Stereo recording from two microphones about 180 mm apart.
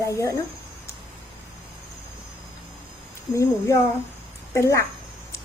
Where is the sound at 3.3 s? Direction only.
15° left (ahead or behind).